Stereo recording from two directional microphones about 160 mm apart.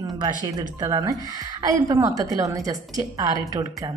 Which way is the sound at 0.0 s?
25° right (ahead or behind).